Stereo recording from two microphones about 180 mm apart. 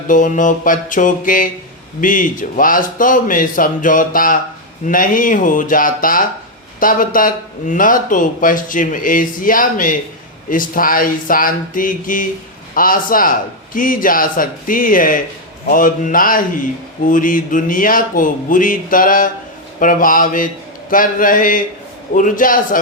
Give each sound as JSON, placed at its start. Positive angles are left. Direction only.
{"t": 0.1, "sound": "speech", "side_deg": 45}